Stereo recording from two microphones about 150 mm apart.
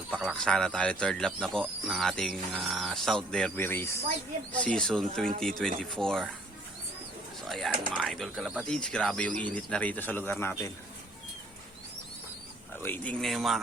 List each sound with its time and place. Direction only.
0.1 s speech: centre (ahead or behind)
7.4 s speech: centre (ahead or behind)
12.7 s speech: 15° left (ahead or behind)